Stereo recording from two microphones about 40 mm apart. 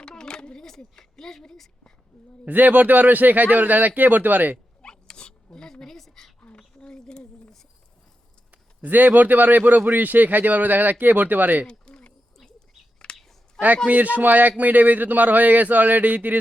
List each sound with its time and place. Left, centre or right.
0.0 s a sound: centre
0.9 s a woman's voice: centre
2.4 s speech: right
4.8 s dog: left
6.6 s a sound: left
8.8 s speech: right
11.6 s a sound: left
12.5 s bird: left
13.8 s speech: right